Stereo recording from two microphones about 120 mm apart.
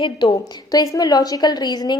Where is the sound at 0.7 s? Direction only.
30° left (ahead or behind).